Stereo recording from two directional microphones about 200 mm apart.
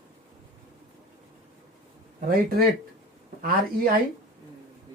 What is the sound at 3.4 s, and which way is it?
Speech, 45° right (ahead or behind).